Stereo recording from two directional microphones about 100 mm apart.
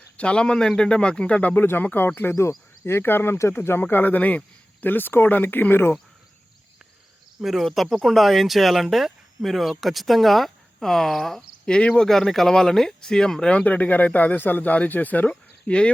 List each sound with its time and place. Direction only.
0.2 s a man's voice: 10° left (ahead or behind)
7.4 s speech: centre (ahead or behind); by 15.3 s 15° left (ahead or behind)
15.3 s a sound: 10° left (ahead or behind)